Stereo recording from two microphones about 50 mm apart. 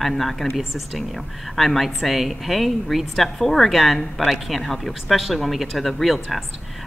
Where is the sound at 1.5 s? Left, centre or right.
Centre.